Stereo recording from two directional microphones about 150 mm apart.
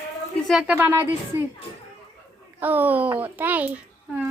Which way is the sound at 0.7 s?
15° right (ahead or behind).